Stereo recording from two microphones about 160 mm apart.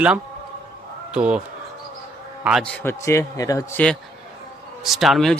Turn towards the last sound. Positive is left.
turn(degrees=0)  # may be behind; listen again after turning